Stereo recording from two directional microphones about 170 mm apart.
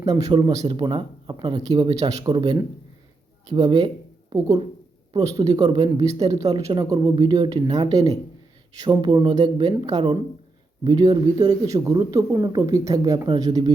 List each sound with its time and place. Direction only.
0.0 s speech: 20° right (ahead or behind)